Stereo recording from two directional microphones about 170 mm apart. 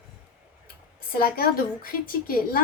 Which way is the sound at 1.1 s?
60° left (ahead or behind).